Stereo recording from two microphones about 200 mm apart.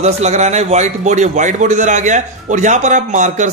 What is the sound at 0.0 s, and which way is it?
A man's voice, 35° right (ahead or behind).